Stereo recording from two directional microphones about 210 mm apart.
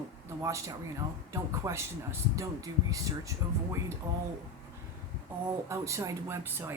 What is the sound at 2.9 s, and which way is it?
Speech, 15° right (ahead or behind).